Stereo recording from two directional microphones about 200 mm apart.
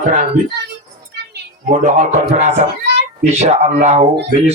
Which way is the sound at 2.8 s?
55° right (ahead or behind).